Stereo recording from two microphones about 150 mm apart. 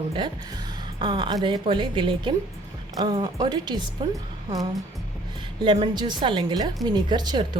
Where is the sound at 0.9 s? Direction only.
30° right (ahead or behind).